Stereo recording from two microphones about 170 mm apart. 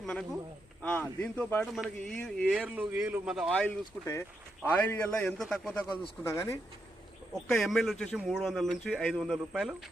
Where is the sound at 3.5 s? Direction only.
10° left (ahead or behind).